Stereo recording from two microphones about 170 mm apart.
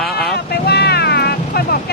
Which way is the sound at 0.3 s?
70° left (ahead or behind).